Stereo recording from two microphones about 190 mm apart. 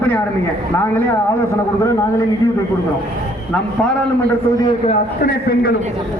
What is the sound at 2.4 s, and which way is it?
Speech, 10° left (ahead or behind).